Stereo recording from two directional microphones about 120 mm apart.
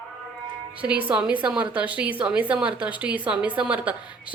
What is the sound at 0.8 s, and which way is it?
A woman's voice, 10° right (ahead or behind).